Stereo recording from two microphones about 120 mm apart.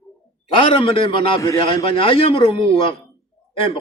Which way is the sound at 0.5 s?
45° left (ahead or behind).